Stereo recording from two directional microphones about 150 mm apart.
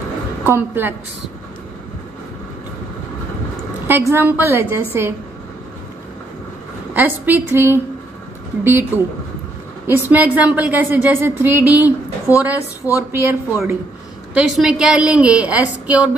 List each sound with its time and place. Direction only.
0.4 s a woman's voice: 15° right (ahead or behind)
4.1 s a woman's voice: 15° right (ahead or behind)
6.9 s a woman's voice: 10° right (ahead or behind)
14.3 s a woman's voice: 5° right (ahead or behind)